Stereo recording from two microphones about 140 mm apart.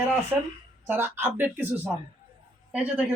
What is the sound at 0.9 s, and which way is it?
Speech, 15° right (ahead or behind).